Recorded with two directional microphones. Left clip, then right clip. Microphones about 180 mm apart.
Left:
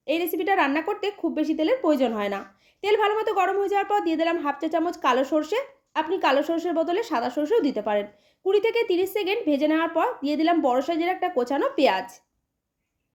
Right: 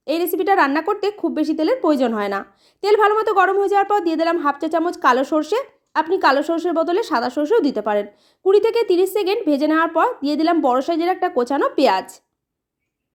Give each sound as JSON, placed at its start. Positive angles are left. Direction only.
{"t": 0.0, "sound": "a woman's voice", "side_deg": -35}